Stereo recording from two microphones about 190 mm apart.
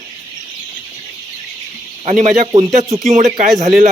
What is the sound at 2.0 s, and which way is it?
A man's voice, 40° right (ahead or behind).